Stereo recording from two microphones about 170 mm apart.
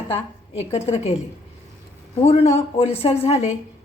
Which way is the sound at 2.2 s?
35° left (ahead or behind).